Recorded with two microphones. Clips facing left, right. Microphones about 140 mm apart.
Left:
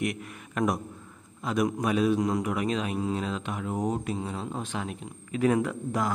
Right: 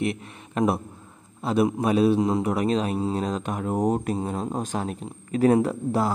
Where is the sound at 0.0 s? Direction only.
30° right (ahead or behind).